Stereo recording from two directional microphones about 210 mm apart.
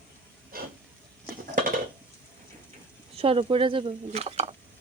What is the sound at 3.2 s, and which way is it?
Speech, 25° right (ahead or behind).